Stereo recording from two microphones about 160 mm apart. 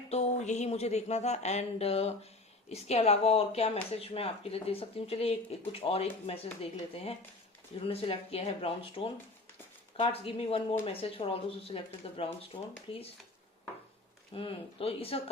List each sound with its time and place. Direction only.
0.1 s speech: 45° left (ahead or behind)
14.3 s speech: 35° left (ahead or behind)